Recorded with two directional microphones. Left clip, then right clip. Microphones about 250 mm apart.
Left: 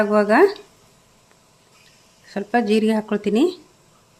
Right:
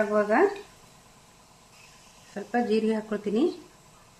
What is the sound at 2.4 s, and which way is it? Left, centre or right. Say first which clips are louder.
Speech: left 7 dB; left.